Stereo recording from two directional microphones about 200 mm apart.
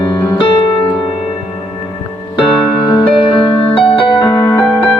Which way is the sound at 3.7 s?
25° left (ahead or behind).